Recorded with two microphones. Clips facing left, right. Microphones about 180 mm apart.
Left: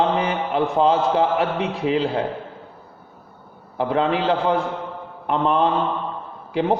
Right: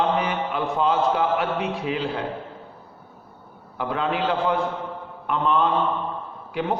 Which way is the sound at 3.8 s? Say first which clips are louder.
Left 4 dB; 30° left (ahead or behind).